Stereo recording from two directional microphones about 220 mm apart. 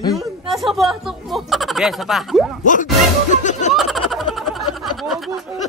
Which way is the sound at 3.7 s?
Centre (ahead or behind).